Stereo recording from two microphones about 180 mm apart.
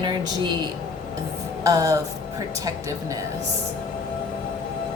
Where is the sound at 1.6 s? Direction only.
20° right (ahead or behind).